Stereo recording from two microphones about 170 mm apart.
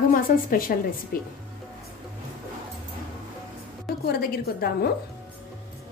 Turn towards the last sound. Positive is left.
turn(degrees=65)  # may be behind; listen again after turning